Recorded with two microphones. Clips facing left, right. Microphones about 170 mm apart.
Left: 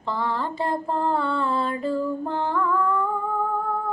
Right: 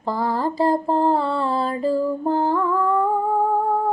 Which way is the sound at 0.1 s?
40° right (ahead or behind).